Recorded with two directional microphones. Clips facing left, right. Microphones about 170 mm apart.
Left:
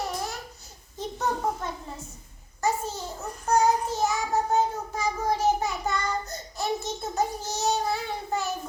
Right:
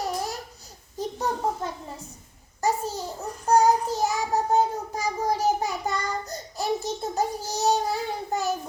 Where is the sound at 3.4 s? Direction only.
35° right (ahead or behind).